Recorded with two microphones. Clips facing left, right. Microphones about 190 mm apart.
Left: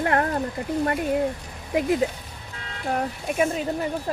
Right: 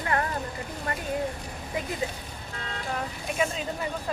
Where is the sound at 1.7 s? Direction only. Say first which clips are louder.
Left 10 dB; 70° left (ahead or behind).